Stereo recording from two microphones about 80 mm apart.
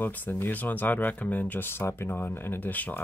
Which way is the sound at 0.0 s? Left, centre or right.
Left.